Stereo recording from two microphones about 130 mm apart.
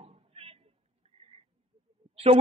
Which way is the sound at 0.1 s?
50° right (ahead or behind).